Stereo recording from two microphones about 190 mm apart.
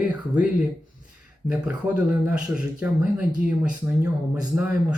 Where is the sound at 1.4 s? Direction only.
10° right (ahead or behind).